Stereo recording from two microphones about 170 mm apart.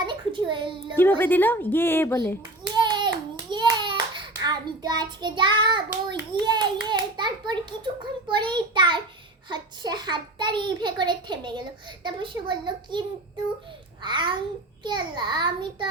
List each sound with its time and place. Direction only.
0.0 s a sound: 25° right (ahead or behind)
0.9 s a woman's voice: 10° left (ahead or behind)
2.7 s hands: 25° right (ahead or behind)
6.1 s a child's voice: 25° right (ahead or behind)